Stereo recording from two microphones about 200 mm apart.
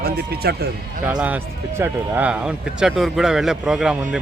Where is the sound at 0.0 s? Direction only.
50° right (ahead or behind).